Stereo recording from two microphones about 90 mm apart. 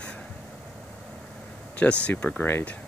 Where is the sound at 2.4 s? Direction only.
25° left (ahead or behind).